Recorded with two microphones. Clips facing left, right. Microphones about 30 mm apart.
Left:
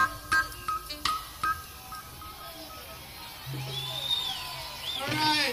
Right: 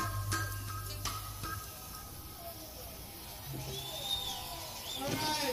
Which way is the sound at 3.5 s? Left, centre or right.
Left.